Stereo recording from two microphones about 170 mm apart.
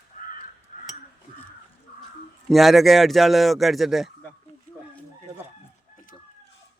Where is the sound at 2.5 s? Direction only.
Centre (ahead or behind).